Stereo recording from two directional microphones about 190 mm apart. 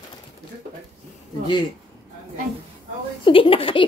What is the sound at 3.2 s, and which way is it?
Speech, 30° left (ahead or behind).